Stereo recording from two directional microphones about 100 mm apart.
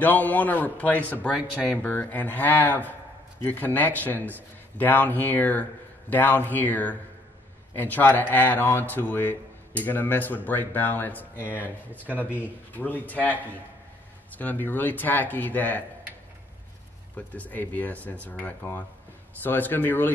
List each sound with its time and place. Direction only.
0.0 s a man's voice: 20° left (ahead or behind)
17.1 s a man's voice: 15° left (ahead or behind)